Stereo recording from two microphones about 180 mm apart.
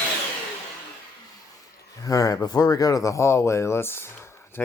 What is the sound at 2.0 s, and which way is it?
Speech, 20° left (ahead or behind).